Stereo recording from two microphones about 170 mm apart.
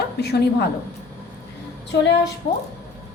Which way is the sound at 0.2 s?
70° left (ahead or behind).